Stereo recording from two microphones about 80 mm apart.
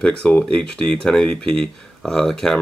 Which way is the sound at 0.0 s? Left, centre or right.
Centre.